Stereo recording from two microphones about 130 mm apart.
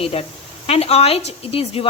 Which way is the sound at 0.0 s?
50° left (ahead or behind).